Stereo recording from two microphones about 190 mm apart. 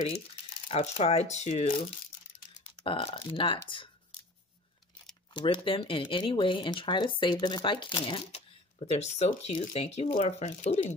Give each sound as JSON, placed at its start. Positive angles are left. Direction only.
{"t": 0.7, "sound": "speech", "side_deg": 30}
{"t": 2.8, "sound": "speech", "side_deg": 30}
{"t": 5.3, "sound": "speech", "side_deg": 25}